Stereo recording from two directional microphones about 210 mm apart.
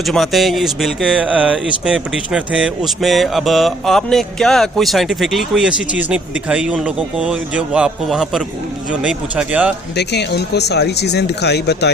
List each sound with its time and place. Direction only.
0.0 s speech: centre (ahead or behind)
9.9 s speech: 55° left (ahead or behind)